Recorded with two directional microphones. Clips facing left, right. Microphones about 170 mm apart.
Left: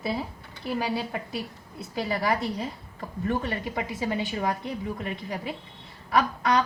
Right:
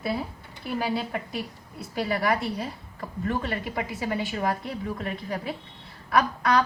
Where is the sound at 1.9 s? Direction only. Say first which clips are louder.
Right 1 dB; 25° left (ahead or behind).